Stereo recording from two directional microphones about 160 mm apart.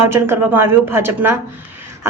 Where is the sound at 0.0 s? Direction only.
15° right (ahead or behind).